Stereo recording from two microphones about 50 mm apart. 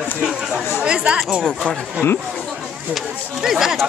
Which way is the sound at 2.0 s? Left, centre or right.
Left.